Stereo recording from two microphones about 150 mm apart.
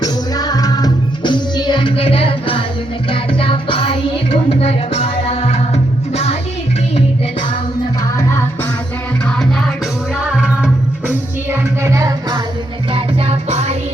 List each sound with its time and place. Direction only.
0.0 s music: 25° left (ahead or behind); by 6.3 s 45° left (ahead or behind)
9.2 s music: 5° left (ahead or behind); by 12.4 s 20° right (ahead or behind)
12.9 s music: 45° right (ahead or behind)